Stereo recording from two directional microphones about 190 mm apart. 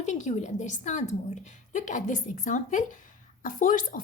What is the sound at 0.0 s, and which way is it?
A woman's voice, 40° left (ahead or behind).